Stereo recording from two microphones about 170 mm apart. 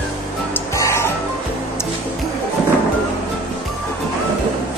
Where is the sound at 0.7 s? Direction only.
15° left (ahead or behind).